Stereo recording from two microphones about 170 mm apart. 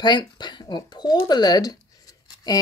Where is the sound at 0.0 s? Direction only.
25° left (ahead or behind).